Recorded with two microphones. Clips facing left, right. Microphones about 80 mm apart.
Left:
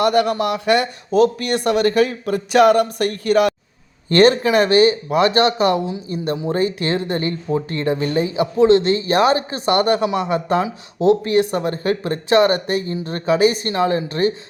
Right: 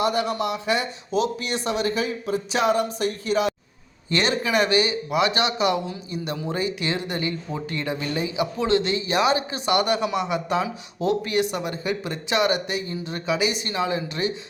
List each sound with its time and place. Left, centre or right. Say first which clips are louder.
0.0 s speech: left 7 dB; left
1.1 s speech: left 8 dB; left
4.1 s speech: left 9 dB; left